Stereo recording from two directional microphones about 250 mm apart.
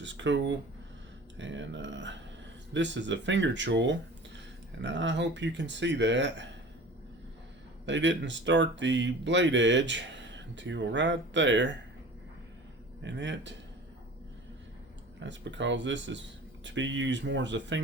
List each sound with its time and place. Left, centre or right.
0.0 s speech: right
7.9 s speech: right
13.0 s speech: right
15.2 s speech: right